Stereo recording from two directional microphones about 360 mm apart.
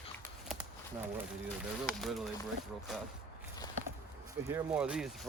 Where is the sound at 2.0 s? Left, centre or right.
Centre.